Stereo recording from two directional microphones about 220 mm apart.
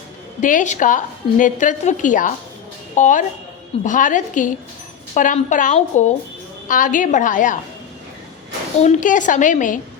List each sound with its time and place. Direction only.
0.4 s a woman's voice: 35° left (ahead or behind)
8.8 s a woman's voice: 35° left (ahead or behind)